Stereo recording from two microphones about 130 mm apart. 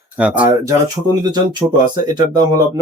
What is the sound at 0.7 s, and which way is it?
Speech, 30° right (ahead or behind).